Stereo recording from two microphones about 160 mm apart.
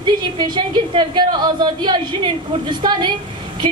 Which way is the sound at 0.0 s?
30° right (ahead or behind).